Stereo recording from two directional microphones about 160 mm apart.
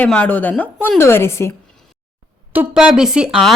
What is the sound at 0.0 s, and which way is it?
A woman's voice, 10° left (ahead or behind).